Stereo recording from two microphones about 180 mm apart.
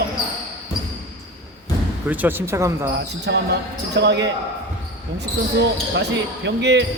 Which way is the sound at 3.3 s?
80° right.